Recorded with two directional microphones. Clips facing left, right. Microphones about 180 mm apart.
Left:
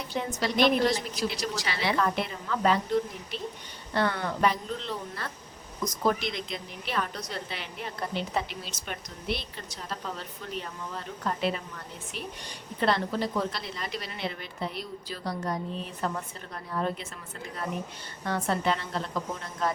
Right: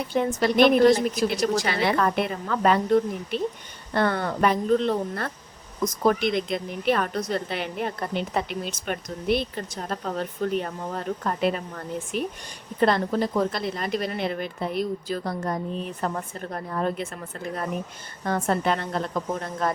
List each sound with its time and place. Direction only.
0.3 s a woman's voice: 55° right (ahead or behind)
18.3 s a woman's voice: 50° right (ahead or behind)